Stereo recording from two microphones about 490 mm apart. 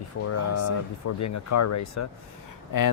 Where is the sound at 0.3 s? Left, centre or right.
Left.